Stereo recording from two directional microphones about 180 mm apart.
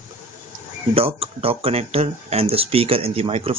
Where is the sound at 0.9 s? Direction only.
30° right (ahead or behind).